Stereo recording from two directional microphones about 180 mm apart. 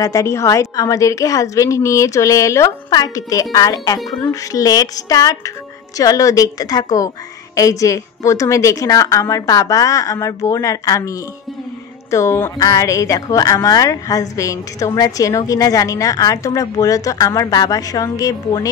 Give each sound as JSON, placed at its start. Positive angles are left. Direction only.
{"t": 0.0, "sound": "a woman's voice", "side_deg": 20}